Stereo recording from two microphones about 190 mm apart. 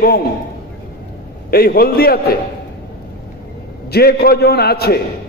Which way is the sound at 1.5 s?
50° left (ahead or behind).